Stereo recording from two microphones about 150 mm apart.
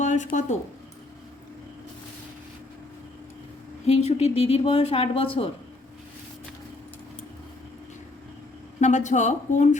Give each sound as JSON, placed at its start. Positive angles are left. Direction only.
{"t": 0.0, "sound": "a sound", "side_deg": 55}
{"t": 3.8, "sound": "speech", "side_deg": 45}
{"t": 8.8, "sound": "a woman's voice", "side_deg": 50}